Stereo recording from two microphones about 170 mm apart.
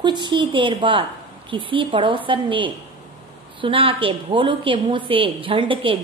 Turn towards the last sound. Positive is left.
turn(degrees=-30)  # may be behind; listen again after turning